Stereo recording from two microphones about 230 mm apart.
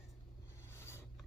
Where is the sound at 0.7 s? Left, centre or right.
Centre.